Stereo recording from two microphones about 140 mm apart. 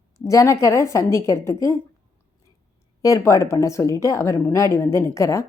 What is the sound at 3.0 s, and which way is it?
Speech, 25° left (ahead or behind).